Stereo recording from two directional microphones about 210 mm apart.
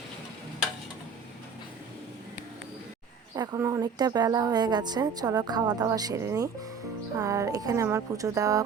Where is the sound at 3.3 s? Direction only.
15° right (ahead or behind).